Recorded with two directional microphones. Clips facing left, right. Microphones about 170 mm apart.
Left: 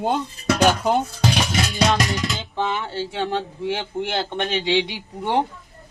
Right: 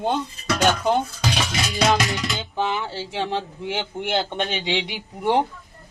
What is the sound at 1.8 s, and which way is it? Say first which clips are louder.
Music: right 1 dB; centre (ahead or behind).